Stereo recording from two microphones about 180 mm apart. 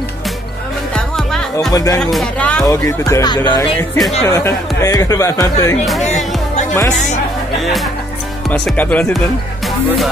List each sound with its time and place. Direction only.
0.9 s music: centre (ahead or behind)
1.7 s speech: 20° left (ahead or behind)
2.0 s music: centre (ahead or behind)
2.6 s speech: 15° left (ahead or behind)
6.0 s music: 40° left (ahead or behind)
8.5 s speech: 10° left (ahead or behind)